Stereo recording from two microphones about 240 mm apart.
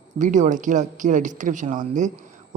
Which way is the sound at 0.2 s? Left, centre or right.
Right.